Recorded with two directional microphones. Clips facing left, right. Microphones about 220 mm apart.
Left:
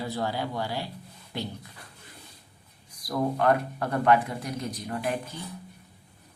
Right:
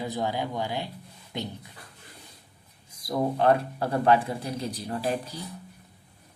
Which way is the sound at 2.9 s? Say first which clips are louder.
Right 1 dB; 25° right (ahead or behind).